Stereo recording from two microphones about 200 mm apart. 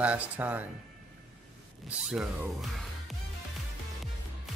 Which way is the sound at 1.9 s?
5° right (ahead or behind).